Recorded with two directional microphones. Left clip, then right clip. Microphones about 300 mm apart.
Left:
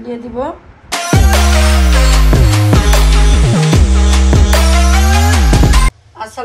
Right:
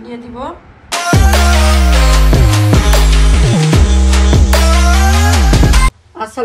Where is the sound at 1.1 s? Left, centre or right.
Centre.